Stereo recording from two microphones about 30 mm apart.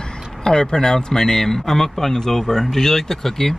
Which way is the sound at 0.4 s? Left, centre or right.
Left.